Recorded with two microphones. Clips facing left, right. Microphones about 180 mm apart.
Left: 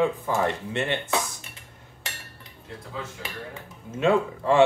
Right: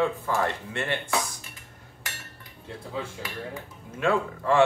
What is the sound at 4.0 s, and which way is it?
Speech, 20° left (ahead or behind).